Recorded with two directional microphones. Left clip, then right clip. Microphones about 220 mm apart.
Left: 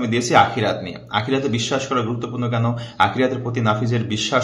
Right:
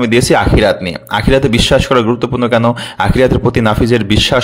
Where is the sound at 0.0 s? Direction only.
45° right (ahead or behind).